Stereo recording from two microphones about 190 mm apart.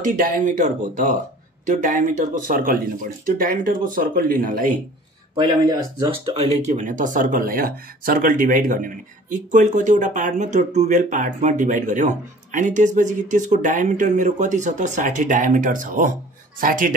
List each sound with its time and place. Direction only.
0.0 s speech: 45° right (ahead or behind)
5.3 s speech: 20° right (ahead or behind); by 16.9 s 45° right (ahead or behind)